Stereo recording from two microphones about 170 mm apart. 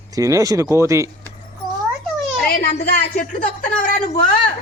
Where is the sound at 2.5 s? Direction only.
55° left (ahead or behind).